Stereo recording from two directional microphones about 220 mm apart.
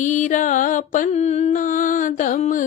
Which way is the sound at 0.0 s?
35° left (ahead or behind).